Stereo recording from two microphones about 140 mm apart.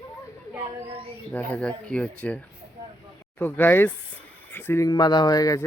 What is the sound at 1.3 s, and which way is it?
Speech, 10° left (ahead or behind).